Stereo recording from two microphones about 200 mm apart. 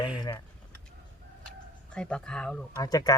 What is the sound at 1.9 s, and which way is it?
Speech, 5° left (ahead or behind).